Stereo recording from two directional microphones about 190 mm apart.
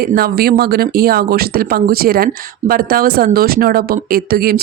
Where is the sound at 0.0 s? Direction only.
55° right (ahead or behind).